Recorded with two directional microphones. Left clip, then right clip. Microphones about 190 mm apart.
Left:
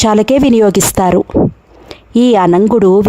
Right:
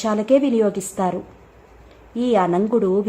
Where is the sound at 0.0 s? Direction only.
60° left (ahead or behind).